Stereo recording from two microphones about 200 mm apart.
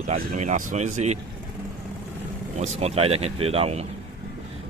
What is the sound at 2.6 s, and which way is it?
A man's voice, 35° right (ahead or behind).